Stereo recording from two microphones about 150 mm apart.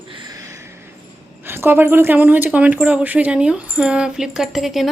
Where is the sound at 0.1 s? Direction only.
30° right (ahead or behind).